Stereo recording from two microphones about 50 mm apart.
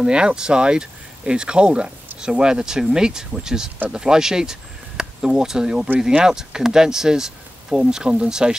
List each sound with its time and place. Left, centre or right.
0.0 s speech: centre